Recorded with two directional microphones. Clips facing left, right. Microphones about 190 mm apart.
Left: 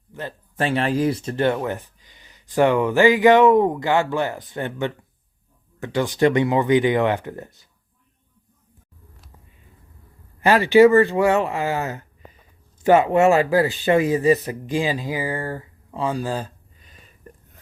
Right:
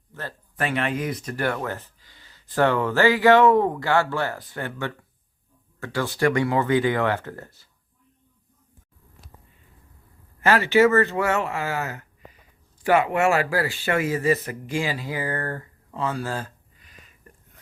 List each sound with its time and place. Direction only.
0.1 s speech: 20° left (ahead or behind)
10.4 s speech: 15° left (ahead or behind)